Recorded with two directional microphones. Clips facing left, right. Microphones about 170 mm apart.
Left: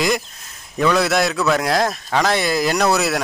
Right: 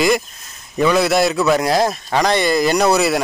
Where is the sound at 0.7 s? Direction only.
Centre (ahead or behind).